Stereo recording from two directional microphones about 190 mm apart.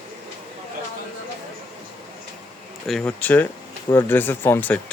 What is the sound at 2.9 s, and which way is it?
Speech, 5° left (ahead or behind).